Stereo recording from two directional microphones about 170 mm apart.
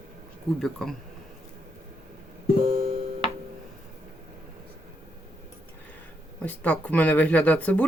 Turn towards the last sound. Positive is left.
turn(degrees=10)  # may be behind; listen again after turning